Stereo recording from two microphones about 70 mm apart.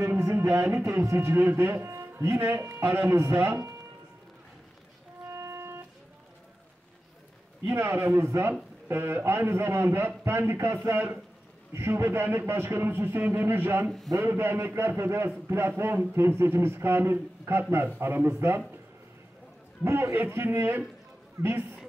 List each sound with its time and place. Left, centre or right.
0.2 s speech: right
5.3 s music: right
7.6 s speech: right
13.8 s a man's voice: centre
14.1 s speech: right
19.8 s speech: right